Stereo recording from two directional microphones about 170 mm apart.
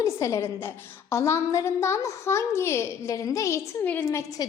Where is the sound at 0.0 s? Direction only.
15° left (ahead or behind).